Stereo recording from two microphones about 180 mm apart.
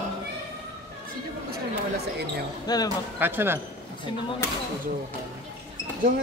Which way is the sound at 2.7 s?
20° left (ahead or behind).